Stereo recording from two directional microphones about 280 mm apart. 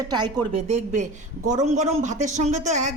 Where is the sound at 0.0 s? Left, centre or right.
Centre.